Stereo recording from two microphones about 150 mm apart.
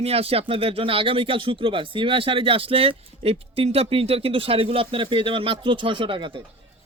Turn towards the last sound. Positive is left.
turn(degrees=-35)  # may be behind; listen again after turning